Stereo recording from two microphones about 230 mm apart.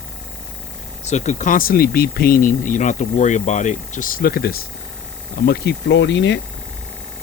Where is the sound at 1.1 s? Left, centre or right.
Left.